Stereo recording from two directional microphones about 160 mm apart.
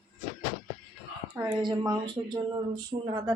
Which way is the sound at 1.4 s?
25° right (ahead or behind).